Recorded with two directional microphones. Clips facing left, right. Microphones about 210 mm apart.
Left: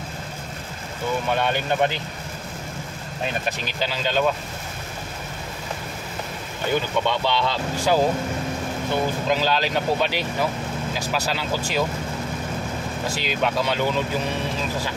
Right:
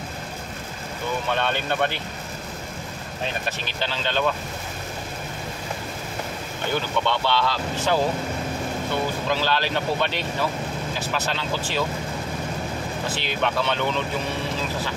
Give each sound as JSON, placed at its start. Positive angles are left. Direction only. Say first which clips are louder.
{"t": 1.3, "sound": "speech", "louder": "left 2 dB", "side_deg": 10}
{"t": 3.8, "sound": "speech", "louder": "left 2 dB", "side_deg": 10}
{"t": 6.7, "sound": "speech", "louder": "left 2 dB", "side_deg": 15}
{"t": 9.3, "sound": "speech", "louder": "left 2 dB", "side_deg": 15}
{"t": 13.1, "sound": "speech", "louder": "left 2 dB", "side_deg": 10}